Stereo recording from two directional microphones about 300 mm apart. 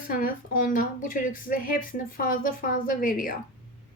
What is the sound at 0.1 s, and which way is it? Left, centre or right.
Speech, left.